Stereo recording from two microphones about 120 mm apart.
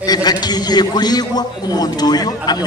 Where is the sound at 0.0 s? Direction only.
35° left (ahead or behind).